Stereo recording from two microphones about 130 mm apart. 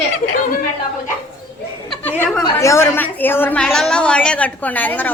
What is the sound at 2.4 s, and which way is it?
A woman's voice, 20° left (ahead or behind).